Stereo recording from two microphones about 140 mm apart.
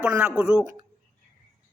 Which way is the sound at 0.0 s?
10° right (ahead or behind).